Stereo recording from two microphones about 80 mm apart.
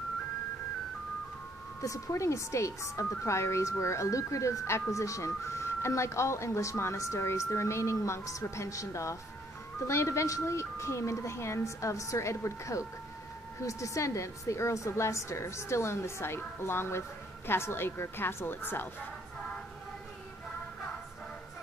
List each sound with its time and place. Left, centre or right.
1.8 s a woman's voice: left